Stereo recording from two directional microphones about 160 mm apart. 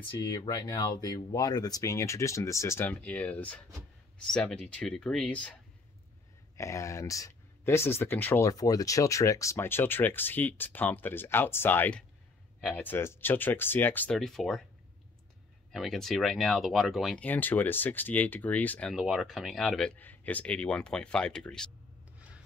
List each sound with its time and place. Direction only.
0.3 s speech: 25° left (ahead or behind); by 5.6 s 10° left (ahead or behind)
6.5 s speech: 20° left (ahead or behind); by 14.6 s centre (ahead or behind)
15.7 s speech: centre (ahead or behind)